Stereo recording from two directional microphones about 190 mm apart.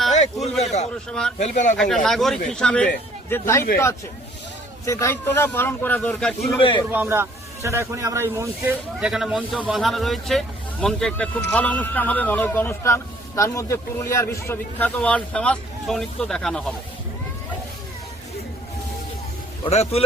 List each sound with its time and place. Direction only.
0.6 s a sound: 35° left (ahead or behind)
1.4 s speech: 40° left (ahead or behind)
1.7 s speech: 5° left (ahead or behind)
4.9 s a man's voice: 15° left (ahead or behind)
6.6 s a man's voice: 25° left (ahead or behind)
6.9 s speech: 10° right (ahead or behind)
19.6 s speech: 35° left (ahead or behind)